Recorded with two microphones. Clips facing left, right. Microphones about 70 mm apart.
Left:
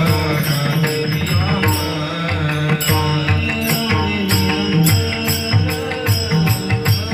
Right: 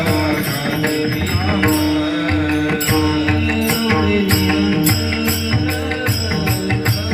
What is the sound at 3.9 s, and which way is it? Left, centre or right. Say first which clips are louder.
Music: right 3 dB; right.